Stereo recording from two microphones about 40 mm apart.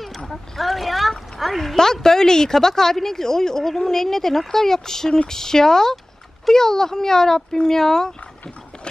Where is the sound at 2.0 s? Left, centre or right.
Centre.